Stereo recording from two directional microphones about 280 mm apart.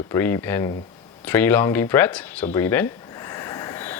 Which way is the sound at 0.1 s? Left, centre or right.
Centre.